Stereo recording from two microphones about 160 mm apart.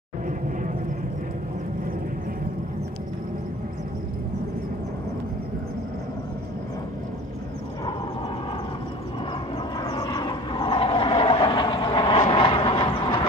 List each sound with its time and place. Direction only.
9.8 s vehicle: 25° left (ahead or behind)